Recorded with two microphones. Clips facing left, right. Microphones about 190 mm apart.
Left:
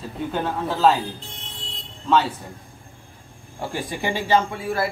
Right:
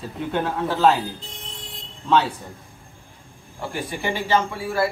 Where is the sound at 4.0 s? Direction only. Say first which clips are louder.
Left 1 dB; 20° left (ahead or behind).